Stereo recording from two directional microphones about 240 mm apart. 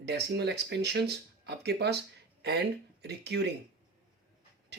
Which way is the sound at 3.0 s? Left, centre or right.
Right.